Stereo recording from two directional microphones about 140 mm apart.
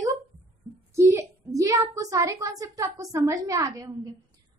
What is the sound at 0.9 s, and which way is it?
A woman's voice, 20° right (ahead or behind).